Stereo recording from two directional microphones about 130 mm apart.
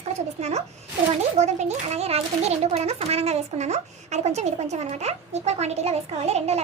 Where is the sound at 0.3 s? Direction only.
55° right (ahead or behind).